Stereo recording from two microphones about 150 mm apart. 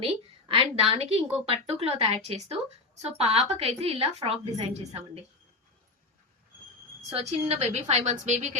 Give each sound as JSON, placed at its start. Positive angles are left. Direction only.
{"t": 0.0, "sound": "a woman's voice", "side_deg": -35}
{"t": 7.1, "sound": "a woman's voice", "side_deg": -40}